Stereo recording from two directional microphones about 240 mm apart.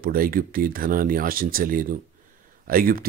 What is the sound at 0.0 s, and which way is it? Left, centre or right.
Speech, right.